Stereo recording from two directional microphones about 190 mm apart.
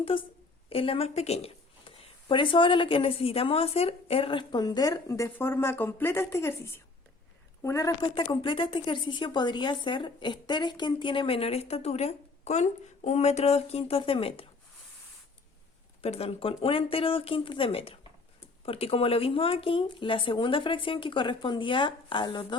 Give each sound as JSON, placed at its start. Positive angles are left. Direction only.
{"t": 0.0, "sound": "a woman's voice", "side_deg": 25}
{"t": 16.0, "sound": "a woman's voice", "side_deg": 30}